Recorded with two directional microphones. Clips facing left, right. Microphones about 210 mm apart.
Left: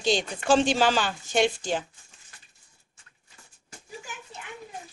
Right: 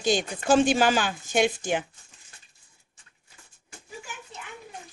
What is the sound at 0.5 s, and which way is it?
Speech, 10° right (ahead or behind).